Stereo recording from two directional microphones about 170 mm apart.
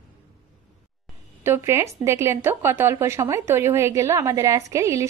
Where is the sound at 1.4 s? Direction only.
15° right (ahead or behind).